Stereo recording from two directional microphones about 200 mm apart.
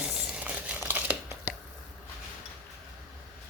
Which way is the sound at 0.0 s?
5° right (ahead or behind).